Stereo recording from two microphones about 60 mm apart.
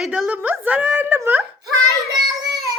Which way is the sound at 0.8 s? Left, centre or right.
Right.